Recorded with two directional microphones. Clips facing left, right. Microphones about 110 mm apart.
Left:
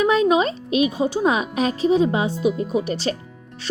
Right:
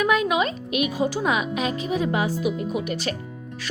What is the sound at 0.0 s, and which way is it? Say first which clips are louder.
Speech: left 4 dB; 30° left (ahead or behind).